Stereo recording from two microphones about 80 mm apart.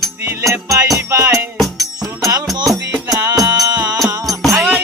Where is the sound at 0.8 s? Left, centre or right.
Right.